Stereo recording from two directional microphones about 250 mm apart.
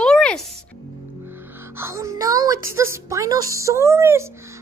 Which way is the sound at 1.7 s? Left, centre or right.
Centre.